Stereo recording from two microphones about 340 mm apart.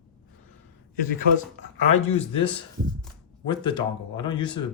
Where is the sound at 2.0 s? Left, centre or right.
Centre.